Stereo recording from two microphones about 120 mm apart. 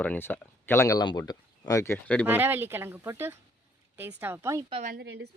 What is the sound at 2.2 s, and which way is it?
A woman's voice, 15° right (ahead or behind).